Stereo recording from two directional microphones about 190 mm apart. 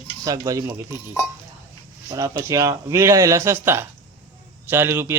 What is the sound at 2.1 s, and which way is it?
Speech, 20° right (ahead or behind).